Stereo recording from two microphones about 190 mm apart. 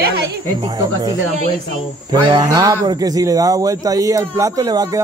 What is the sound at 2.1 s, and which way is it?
Cricket, 20° right (ahead or behind).